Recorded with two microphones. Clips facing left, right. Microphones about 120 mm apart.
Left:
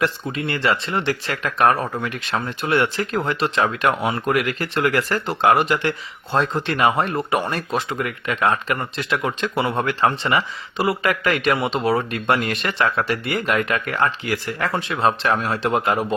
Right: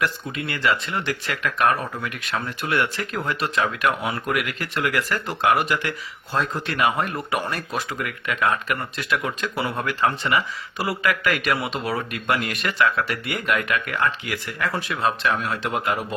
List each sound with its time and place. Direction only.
0.0 s speech: 30° left (ahead or behind)